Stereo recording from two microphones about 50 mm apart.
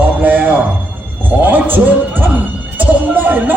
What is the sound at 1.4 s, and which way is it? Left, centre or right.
Music, right.